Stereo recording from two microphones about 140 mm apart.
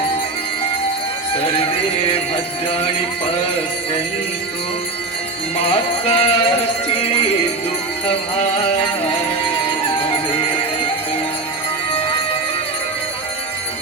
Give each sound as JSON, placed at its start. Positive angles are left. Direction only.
{"t": 1.4, "sound": "music", "side_deg": 45}
{"t": 5.6, "sound": "music", "side_deg": 40}
{"t": 10.0, "sound": "music", "side_deg": 40}